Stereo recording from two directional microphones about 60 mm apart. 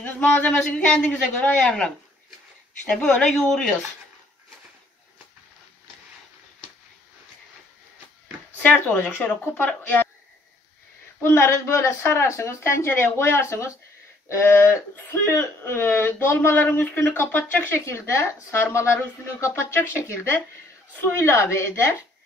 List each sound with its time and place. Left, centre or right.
0.0 s a man's voice: left
8.6 s a man's voice: left
11.2 s speech: left
17.7 s speech: left